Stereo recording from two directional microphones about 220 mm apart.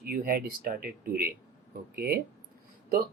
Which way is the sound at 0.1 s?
40° right (ahead or behind).